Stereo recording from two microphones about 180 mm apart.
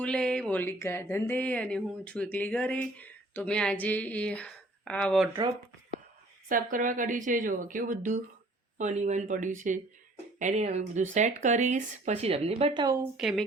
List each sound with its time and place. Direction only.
0.0 s speech: 5° left (ahead or behind)
6.5 s speech: 45° right (ahead or behind); by 13.0 s 25° right (ahead or behind)
13.0 s a woman's voice: centre (ahead or behind)